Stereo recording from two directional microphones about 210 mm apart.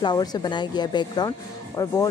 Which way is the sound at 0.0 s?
20° left (ahead or behind).